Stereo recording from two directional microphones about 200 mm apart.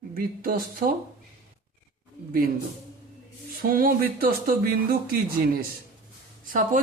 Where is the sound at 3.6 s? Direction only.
45° right (ahead or behind).